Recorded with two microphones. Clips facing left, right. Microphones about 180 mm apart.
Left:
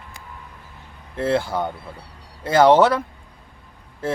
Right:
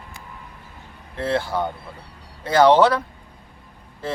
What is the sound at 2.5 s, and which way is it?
Speech, 20° left (ahead or behind).